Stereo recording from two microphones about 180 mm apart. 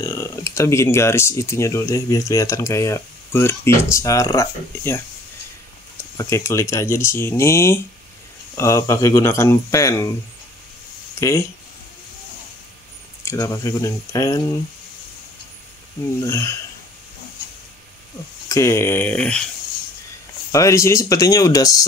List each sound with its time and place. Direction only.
0.0 s speech: 15° left (ahead or behind)
6.1 s speech: 15° left (ahead or behind)
11.1 s speech: 15° left (ahead or behind)
13.2 s speech: 15° left (ahead or behind)
16.3 s speech: 15° left (ahead or behind)
18.5 s speech: 15° left (ahead or behind)
20.5 s speech: 15° left (ahead or behind)